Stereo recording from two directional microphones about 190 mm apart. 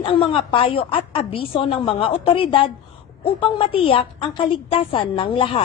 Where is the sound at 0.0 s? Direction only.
30° left (ahead or behind).